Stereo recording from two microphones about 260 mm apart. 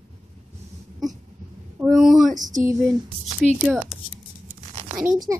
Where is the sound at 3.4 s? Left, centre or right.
Right.